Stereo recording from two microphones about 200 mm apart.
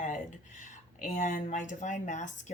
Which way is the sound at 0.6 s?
40° left (ahead or behind).